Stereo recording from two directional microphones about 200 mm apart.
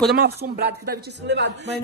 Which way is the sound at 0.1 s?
55° right (ahead or behind).